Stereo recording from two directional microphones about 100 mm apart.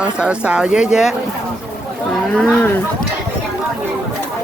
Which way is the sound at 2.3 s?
10° left (ahead or behind).